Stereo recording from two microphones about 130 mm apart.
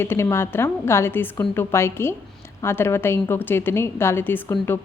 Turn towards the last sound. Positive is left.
turn(degrees=15)  # may be behind; listen again after turning